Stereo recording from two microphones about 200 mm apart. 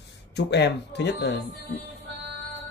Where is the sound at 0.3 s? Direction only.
60° left (ahead or behind).